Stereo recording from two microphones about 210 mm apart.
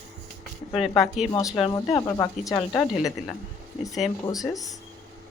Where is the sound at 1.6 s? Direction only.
15° left (ahead or behind).